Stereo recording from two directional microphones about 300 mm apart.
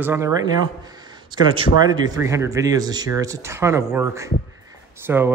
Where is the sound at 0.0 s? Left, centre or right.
Centre.